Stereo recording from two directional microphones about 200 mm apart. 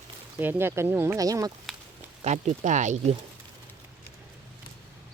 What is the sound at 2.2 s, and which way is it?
Speech, 35° right (ahead or behind).